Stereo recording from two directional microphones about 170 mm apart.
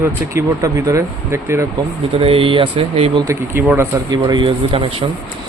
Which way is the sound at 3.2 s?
15° right (ahead or behind).